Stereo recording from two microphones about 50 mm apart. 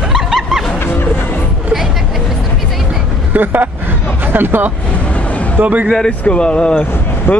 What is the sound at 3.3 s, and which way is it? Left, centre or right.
Vehicle, right.